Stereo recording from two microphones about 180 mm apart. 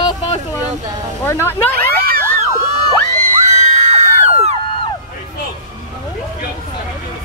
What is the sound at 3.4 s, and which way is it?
Screaming, 40° right (ahead or behind).